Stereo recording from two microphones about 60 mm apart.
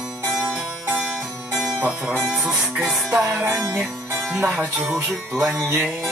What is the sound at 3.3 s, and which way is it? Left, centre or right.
Music, right.